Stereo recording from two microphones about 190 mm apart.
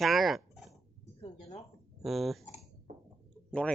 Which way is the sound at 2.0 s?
Centre (ahead or behind).